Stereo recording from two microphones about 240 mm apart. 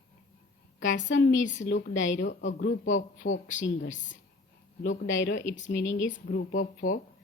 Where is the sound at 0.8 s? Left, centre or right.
Left.